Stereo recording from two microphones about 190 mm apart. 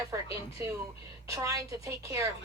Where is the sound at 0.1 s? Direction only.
20° right (ahead or behind).